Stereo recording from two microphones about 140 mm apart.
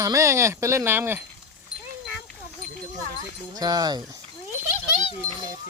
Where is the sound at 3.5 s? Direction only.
25° right (ahead or behind).